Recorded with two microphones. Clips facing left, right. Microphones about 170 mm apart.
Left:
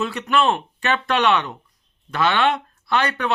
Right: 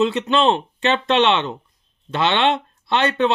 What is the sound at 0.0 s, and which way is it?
Speech, 20° right (ahead or behind).